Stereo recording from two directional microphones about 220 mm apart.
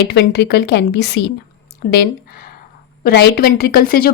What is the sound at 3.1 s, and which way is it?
Speech, 45° left (ahead or behind).